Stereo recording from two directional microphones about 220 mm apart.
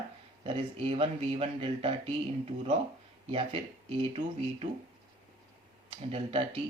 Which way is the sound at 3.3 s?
25° right (ahead or behind).